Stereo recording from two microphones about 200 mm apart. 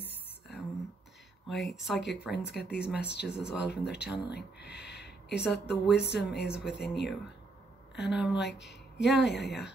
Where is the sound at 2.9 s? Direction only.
55° left (ahead or behind).